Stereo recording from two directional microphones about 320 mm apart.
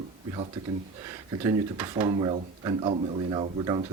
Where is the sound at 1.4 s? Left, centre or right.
Centre.